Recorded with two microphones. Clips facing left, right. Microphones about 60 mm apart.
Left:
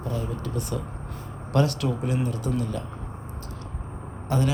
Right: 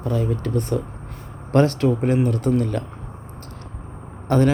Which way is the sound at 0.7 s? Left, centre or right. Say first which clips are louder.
Right 6 dB; right.